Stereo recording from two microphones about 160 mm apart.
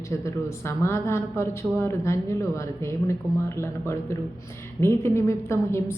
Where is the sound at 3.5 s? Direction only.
15° left (ahead or behind).